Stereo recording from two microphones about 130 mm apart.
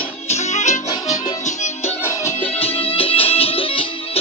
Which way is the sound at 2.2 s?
15° left (ahead or behind).